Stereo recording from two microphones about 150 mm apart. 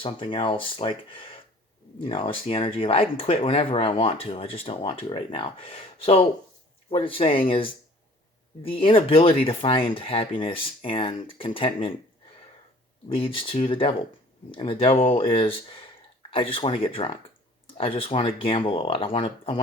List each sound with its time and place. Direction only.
0.0 s speech: 35° left (ahead or behind)
13.1 s speech: 35° left (ahead or behind)